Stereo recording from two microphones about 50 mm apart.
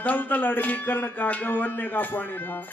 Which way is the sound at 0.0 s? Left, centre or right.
Left.